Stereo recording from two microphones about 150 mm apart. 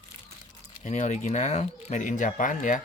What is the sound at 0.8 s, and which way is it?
Speech, 55° left (ahead or behind).